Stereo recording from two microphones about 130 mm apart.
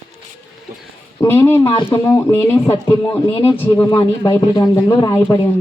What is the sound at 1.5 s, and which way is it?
Speech, 20° left (ahead or behind).